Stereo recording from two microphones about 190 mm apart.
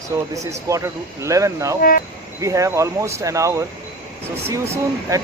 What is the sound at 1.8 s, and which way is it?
Speech, 50° left (ahead or behind).